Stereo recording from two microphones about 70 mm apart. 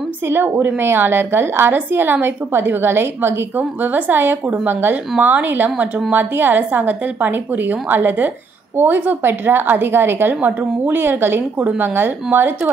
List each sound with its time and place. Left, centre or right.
0.3 s a woman's voice: right